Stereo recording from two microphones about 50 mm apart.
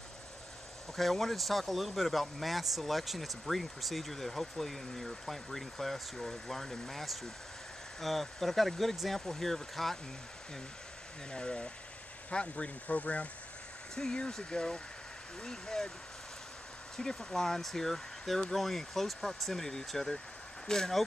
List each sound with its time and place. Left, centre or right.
0.9 s speech: centre
11.3 s speech: centre
13.9 s speech: centre
16.9 s speech: centre